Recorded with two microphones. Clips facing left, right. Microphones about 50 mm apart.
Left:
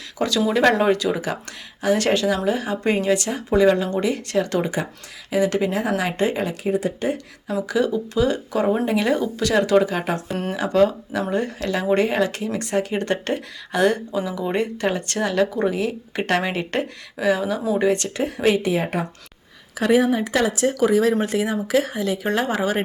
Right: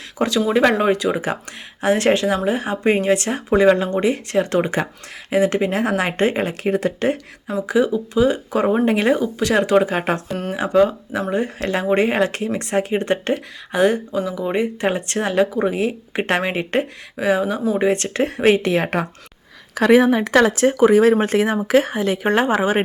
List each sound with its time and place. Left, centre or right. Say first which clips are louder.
0.2 s speech: right 2 dB; right
7.7 s speech: right 4 dB; right
9.4 s speech: even; right
10.2 s speech: right 1 dB; centre
10.5 s speech: right 2 dB; right
14.8 s speech: right 2 dB; right
18.6 s speech: right 3 dB; right
20.7 s speech: right 5 dB; right